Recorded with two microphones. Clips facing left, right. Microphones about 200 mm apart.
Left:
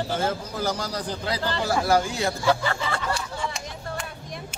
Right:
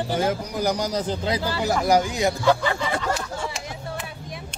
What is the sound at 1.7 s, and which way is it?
Speech, 15° right (ahead or behind).